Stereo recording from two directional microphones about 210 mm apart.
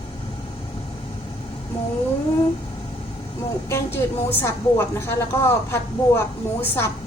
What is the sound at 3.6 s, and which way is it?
A woman's voice, 10° left (ahead or behind).